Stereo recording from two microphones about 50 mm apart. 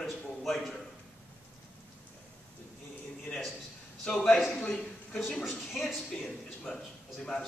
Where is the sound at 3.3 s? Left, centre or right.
Centre.